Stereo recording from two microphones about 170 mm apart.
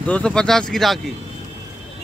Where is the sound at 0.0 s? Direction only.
5° left (ahead or behind).